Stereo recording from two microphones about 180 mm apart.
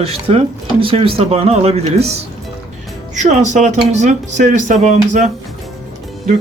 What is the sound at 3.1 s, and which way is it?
Speech, 40° right (ahead or behind).